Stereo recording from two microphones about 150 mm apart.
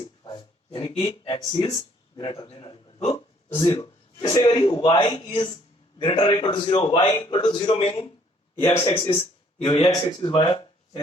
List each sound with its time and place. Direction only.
0.0 s a sound: 35° left (ahead or behind)
2.1 s a man's voice: 30° left (ahead or behind)
3.6 s a man's voice: 25° left (ahead or behind)